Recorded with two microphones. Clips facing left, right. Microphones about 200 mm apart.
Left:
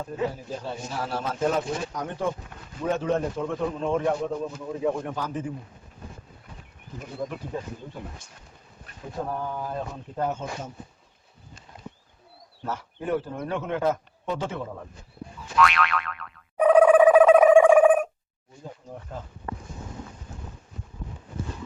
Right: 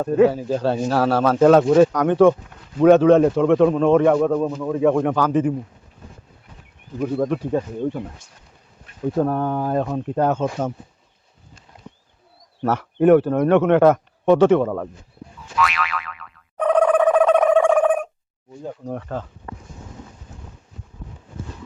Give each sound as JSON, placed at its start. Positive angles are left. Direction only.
{"t": 0.0, "sound": "a man's voice", "side_deg": -65}
{"t": 7.0, "sound": "a man's voice", "side_deg": -65}
{"t": 9.1, "sound": "speech", "side_deg": -60}
{"t": 12.6, "sound": "a man's voice", "side_deg": -70}
{"t": 15.5, "sound": "boing", "side_deg": 0}
{"t": 16.6, "sound": "a sound", "side_deg": 5}
{"t": 18.9, "sound": "speech", "side_deg": -80}